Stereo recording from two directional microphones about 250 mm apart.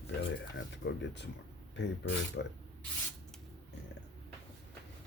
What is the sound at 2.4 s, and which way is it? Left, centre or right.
Speech, left.